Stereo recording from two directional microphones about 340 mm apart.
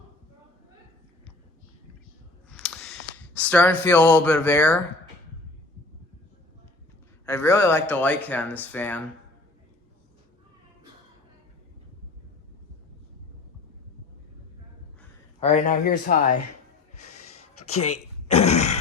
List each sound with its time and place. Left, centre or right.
2.5 s a sound: centre
7.3 s speech: centre
15.4 s speech: centre
18.3 s throat clearing: centre